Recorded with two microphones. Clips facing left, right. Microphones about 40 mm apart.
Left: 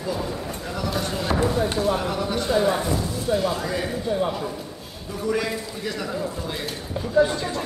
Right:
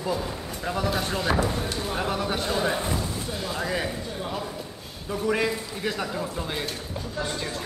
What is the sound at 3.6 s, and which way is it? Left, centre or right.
Speech, centre.